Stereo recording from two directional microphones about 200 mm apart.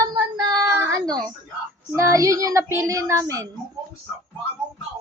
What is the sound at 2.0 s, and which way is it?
Speech, 15° right (ahead or behind).